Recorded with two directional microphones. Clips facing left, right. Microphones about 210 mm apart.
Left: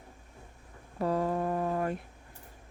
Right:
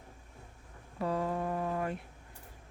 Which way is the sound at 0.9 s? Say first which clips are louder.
Left 4 dB; 40° left (ahead or behind).